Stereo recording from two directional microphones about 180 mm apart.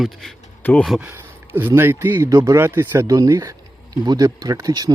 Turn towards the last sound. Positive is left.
turn(degrees=-20)  # may be behind; listen again after turning